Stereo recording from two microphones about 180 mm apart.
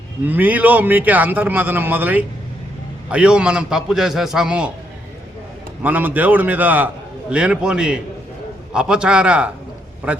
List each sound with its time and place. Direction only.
0.3 s a man's voice: 10° right (ahead or behind)
5.8 s a man's voice: 10° right (ahead or behind)